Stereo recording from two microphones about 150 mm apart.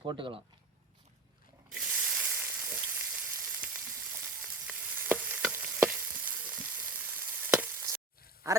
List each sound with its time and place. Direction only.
0.0 s speech: 30° right (ahead or behind)
1.7 s frying: 5° right (ahead or behind)